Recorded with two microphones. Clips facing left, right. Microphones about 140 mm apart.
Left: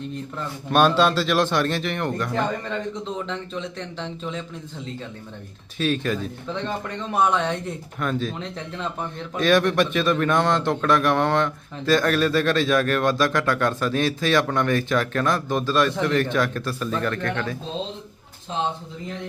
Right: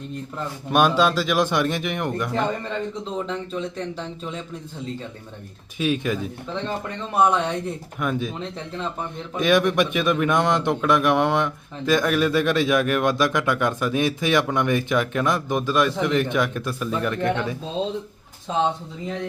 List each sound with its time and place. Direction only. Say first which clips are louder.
0.7 s speech: left 1 dB; 10° right (ahead or behind)
5.7 s speech: even; 15° right (ahead or behind)
7.2 s speech: right 2 dB; 5° right (ahead or behind)